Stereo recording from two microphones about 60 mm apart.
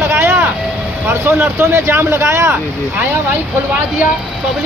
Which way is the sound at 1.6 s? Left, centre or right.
Right.